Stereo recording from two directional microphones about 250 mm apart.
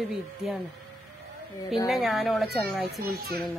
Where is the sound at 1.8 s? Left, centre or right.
Centre.